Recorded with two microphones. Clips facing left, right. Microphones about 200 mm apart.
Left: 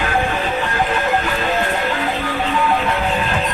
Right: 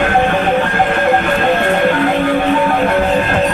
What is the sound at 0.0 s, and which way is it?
Music, 60° right (ahead or behind).